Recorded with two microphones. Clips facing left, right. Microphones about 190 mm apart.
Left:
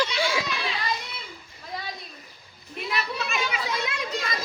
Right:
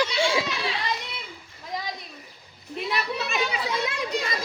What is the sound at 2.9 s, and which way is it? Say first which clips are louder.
Speech: right 1 dB; 35° right (ahead or behind).